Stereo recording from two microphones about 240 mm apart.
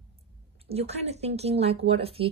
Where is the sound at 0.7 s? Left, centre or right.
Right.